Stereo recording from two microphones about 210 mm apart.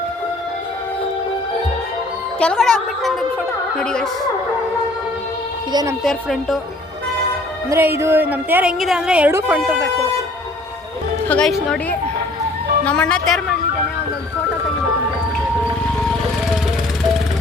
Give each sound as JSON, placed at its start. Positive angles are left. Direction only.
{"t": 2.4, "sound": "a woman's voice", "side_deg": 5}
{"t": 5.7, "sound": "speech", "side_deg": -15}
{"t": 6.0, "sound": "a woman's voice", "side_deg": 0}
{"t": 7.9, "sound": "speech", "side_deg": -10}
{"t": 11.3, "sound": "a woman's voice", "side_deg": 5}
{"t": 12.8, "sound": "a woman's voice", "side_deg": 5}